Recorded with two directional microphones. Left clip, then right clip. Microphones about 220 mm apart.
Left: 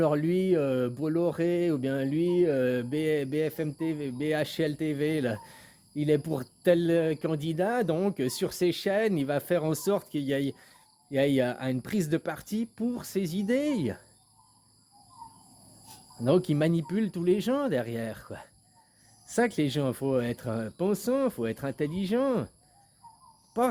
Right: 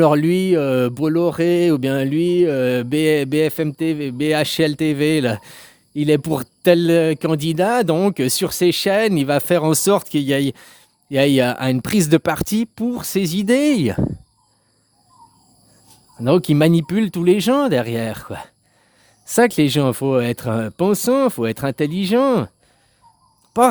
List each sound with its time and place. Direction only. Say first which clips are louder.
0.0 s speech: right 11 dB; 50° right (ahead or behind)
16.2 s speech: right 10 dB; 50° right (ahead or behind)
23.6 s speech: right 13 dB; 50° right (ahead or behind)